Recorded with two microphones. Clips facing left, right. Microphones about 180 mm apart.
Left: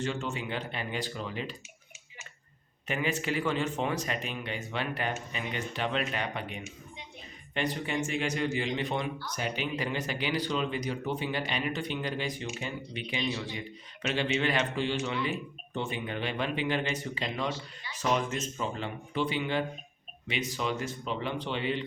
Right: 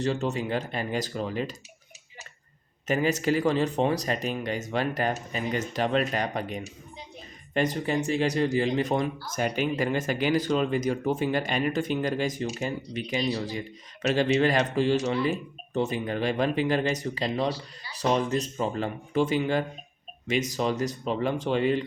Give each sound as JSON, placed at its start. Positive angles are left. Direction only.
{"t": 0.0, "sound": "speech", "side_deg": -40}
{"t": 2.8, "sound": "speech", "side_deg": -40}